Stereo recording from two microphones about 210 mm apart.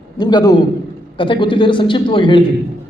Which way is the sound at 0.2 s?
20° left (ahead or behind).